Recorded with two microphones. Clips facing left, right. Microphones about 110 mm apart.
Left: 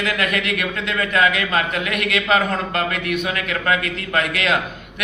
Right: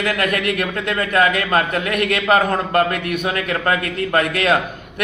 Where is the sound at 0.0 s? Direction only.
40° right (ahead or behind).